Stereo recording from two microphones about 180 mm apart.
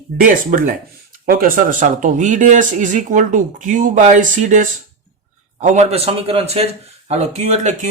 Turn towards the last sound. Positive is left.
turn(degrees=-40)  # may be behind; listen again after turning